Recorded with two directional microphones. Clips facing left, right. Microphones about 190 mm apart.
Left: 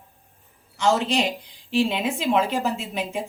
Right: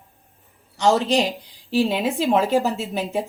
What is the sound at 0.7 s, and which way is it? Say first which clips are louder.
A woman's voice: right 3 dB; 35° right (ahead or behind).